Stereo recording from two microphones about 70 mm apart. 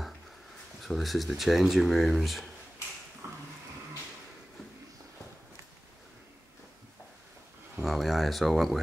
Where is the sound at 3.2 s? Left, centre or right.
Right.